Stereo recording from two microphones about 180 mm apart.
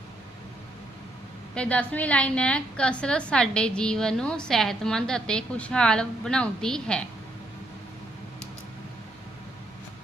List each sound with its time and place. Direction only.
1.5 s a woman's voice: 5° left (ahead or behind)